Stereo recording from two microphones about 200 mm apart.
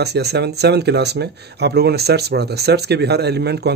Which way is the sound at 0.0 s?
55° right (ahead or behind).